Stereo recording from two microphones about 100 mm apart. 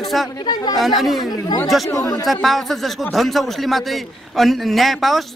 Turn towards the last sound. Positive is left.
turn(degrees=0)  # may be behind; listen again after turning